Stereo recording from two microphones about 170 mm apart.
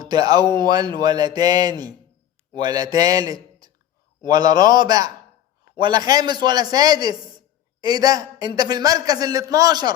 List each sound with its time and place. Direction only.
0.0 s a man's voice: 25° right (ahead or behind)